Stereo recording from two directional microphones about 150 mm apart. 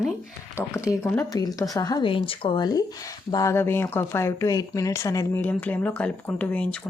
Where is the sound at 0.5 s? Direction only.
20° left (ahead or behind).